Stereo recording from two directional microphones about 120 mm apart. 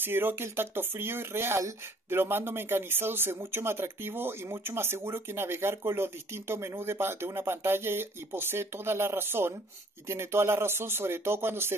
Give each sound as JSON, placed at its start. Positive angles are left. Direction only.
{"t": 0.0, "sound": "speech", "side_deg": -20}